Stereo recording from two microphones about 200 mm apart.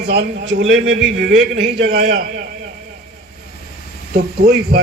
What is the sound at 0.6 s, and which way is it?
A man's voice, 70° right (ahead or behind).